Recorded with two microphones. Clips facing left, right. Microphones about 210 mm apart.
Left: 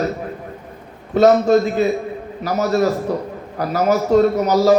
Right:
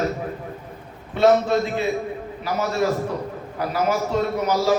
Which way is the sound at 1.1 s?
40° left (ahead or behind).